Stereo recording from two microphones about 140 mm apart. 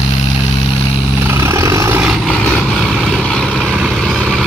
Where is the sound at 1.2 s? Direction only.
20° right (ahead or behind).